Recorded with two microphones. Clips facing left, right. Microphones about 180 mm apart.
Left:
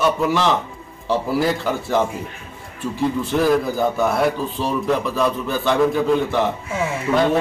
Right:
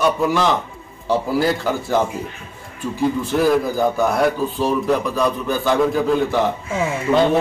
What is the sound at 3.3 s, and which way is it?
A man's voice, centre (ahead or behind).